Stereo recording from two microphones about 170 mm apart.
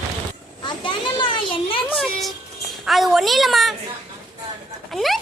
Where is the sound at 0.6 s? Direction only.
30° left (ahead or behind).